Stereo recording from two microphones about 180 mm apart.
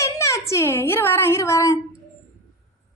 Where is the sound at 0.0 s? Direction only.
15° left (ahead or behind).